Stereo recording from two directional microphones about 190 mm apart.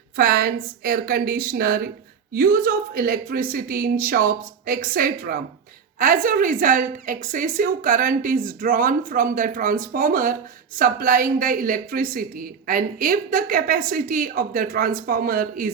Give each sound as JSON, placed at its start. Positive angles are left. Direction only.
{"t": 0.2, "sound": "a woman's voice", "side_deg": -50}